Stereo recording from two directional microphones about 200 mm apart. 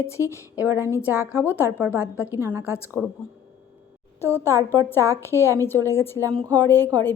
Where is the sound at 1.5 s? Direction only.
10° left (ahead or behind).